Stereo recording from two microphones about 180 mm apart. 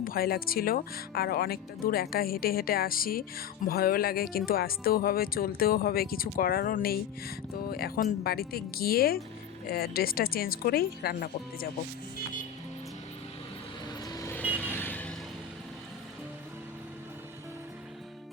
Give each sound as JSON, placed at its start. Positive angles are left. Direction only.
{"t": 0.0, "sound": "speech", "side_deg": 55}
{"t": 14.1, "sound": "vehicle", "side_deg": 20}